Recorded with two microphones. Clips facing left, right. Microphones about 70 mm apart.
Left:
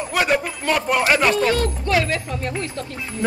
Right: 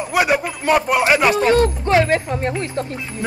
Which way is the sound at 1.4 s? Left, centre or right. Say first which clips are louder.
Right 5 dB; right.